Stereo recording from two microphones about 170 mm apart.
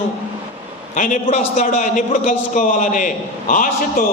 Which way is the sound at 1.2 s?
45° left (ahead or behind).